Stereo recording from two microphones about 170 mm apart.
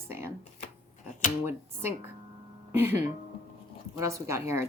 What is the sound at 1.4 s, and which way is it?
A woman's voice, 15° right (ahead or behind).